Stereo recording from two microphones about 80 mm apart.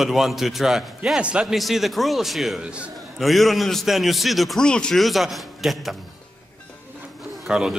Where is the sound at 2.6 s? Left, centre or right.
Centre.